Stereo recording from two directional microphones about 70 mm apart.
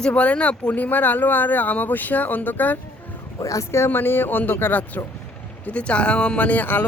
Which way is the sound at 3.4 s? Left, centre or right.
Left.